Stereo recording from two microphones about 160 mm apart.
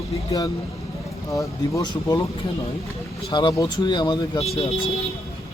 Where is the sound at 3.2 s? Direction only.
30° left (ahead or behind).